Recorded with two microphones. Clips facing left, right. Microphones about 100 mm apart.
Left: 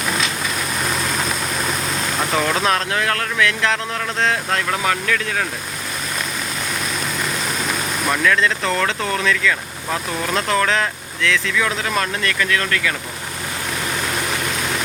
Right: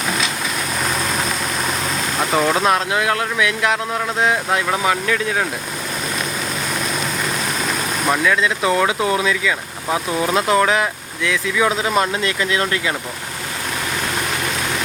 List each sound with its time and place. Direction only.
2.3 s speech: 5° right (ahead or behind)
8.0 s speech: 15° right (ahead or behind)